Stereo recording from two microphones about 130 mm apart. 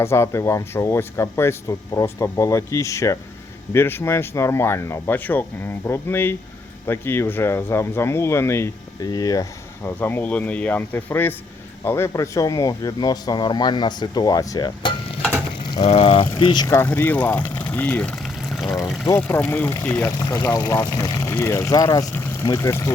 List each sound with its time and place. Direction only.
0.0 s speech: 20° left (ahead or behind)
9.0 s speech: 30° left (ahead or behind)
10.0 s speech: 15° left (ahead or behind); by 14.9 s 30° left (ahead or behind)
15.6 s a sound: 35° left (ahead or behind)
15.9 s speech: 45° left (ahead or behind)
16.7 s speech: 15° left (ahead or behind); by 18.8 s centre (ahead or behind)
19.1 s speech: 15° left (ahead or behind)